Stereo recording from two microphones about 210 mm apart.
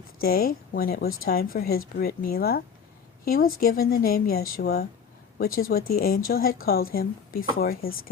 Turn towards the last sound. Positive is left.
turn(degrees=45)  # may be behind; listen again after turning